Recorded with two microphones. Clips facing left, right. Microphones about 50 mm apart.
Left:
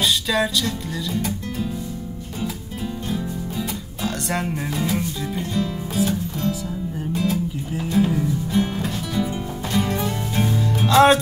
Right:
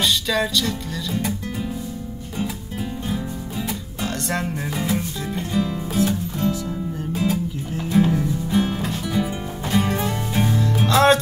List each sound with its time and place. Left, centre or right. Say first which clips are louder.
0.0 s music: even; centre
1.1 s music: right 2 dB; centre
4.0 s speech: left 1 dB; centre
5.5 s music: right 4 dB; centre
6.4 s music: right 3 dB; centre
7.9 s music: right 1 dB; centre
9.0 s music: right 1 dB; centre